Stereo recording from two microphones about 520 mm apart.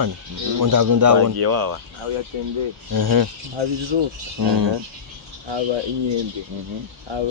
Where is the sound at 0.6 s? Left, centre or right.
Right.